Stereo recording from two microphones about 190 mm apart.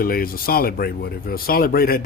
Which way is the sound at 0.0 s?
50° left (ahead or behind).